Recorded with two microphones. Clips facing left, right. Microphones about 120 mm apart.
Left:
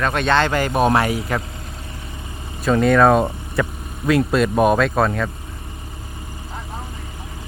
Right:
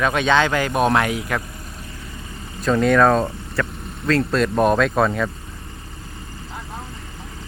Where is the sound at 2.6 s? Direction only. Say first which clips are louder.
Left 1 dB; 5° left (ahead or behind).